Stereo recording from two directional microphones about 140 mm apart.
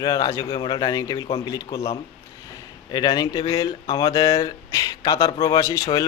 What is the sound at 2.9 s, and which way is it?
Speech, 30° left (ahead or behind).